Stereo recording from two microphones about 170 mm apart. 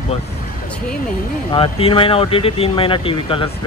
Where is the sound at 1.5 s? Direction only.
30° left (ahead or behind).